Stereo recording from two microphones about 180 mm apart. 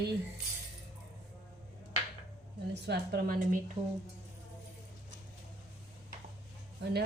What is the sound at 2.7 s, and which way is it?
Speech, 60° right (ahead or behind).